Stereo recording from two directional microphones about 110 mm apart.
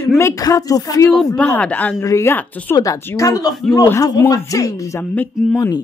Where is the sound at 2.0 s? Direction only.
25° left (ahead or behind).